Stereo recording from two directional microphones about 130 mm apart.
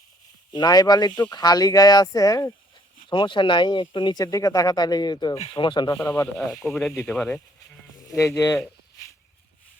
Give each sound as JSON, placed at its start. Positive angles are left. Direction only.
{"t": 0.5, "sound": "speech", "side_deg": 30}
{"t": 3.1, "sound": "speech", "side_deg": 35}
{"t": 5.9, "sound": "speech", "side_deg": 20}
{"t": 6.5, "sound": "speech", "side_deg": 5}
{"t": 8.2, "sound": "speech", "side_deg": 25}